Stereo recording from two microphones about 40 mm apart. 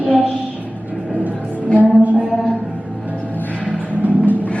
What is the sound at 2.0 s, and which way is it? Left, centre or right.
Mantra, right.